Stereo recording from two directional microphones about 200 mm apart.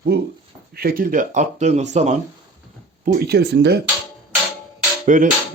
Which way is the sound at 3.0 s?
50° right (ahead or behind).